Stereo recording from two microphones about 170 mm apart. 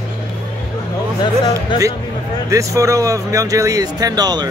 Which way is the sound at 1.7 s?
25° left (ahead or behind).